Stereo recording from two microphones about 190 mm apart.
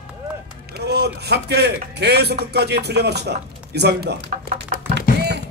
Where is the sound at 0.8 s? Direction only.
60° right (ahead or behind).